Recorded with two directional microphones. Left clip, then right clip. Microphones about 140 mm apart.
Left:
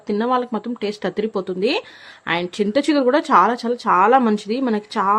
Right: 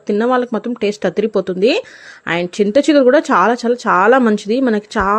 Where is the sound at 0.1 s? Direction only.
25° right (ahead or behind).